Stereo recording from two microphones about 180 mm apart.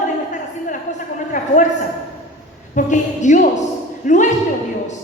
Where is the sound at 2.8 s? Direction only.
45° left (ahead or behind).